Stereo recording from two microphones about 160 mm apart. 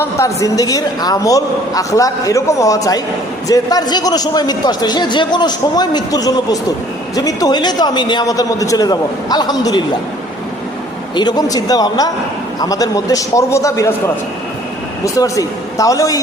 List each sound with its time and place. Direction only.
0.0 s a man's voice: 20° left (ahead or behind)
11.1 s a man's voice: 25° left (ahead or behind)
15.0 s a man's voice: 20° left (ahead or behind)